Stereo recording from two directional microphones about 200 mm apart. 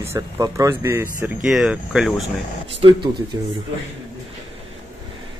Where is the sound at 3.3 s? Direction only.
20° right (ahead or behind).